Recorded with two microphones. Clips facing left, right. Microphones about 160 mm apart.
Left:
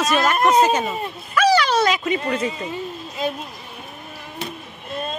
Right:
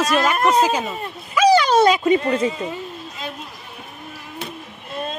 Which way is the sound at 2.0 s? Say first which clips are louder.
Right 5 dB; 30° right (ahead or behind).